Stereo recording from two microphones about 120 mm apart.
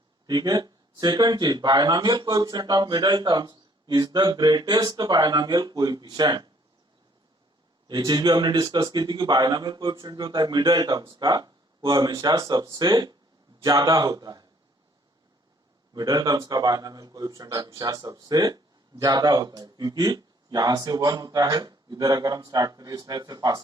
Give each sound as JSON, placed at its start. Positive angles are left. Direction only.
{"t": 0.3, "sound": "speech", "side_deg": -35}
{"t": 7.9, "sound": "speech", "side_deg": -35}
{"t": 16.0, "sound": "speech", "side_deg": -35}